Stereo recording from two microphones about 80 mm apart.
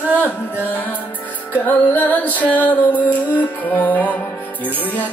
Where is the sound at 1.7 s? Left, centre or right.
Left.